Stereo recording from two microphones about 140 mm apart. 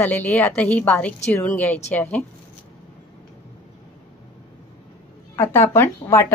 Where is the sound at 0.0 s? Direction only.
15° left (ahead or behind).